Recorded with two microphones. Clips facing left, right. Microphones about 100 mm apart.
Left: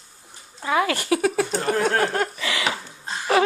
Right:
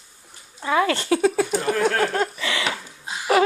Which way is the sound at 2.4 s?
20° left (ahead or behind).